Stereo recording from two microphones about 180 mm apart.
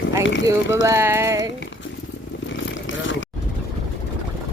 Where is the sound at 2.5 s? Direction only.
90° left.